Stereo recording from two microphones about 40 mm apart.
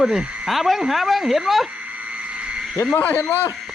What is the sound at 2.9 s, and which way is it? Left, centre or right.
Speech, left.